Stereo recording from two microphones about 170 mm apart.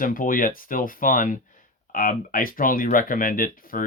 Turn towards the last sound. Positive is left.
turn(degrees=55)  # may be behind; listen again after turning